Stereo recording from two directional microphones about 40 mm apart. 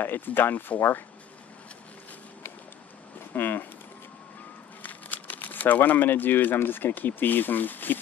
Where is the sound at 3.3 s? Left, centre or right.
Left.